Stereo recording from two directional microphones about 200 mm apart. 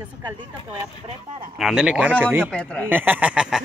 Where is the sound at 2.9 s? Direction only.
10° right (ahead or behind).